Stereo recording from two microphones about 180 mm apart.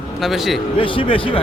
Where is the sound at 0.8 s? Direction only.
30° left (ahead or behind).